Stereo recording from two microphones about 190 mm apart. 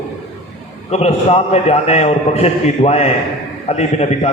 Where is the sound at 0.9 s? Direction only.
35° left (ahead or behind).